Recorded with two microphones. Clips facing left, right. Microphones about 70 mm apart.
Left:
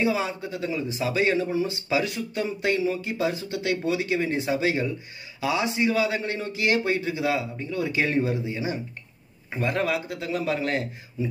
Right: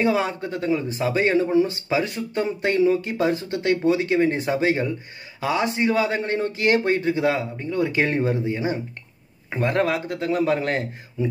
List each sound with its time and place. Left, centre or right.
0.0 s speech: right